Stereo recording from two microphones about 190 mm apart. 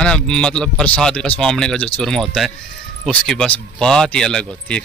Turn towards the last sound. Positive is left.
turn(degrees=5)  # may be behind; listen again after turning